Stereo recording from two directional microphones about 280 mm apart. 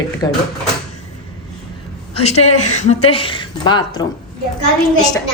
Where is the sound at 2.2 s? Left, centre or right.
Left.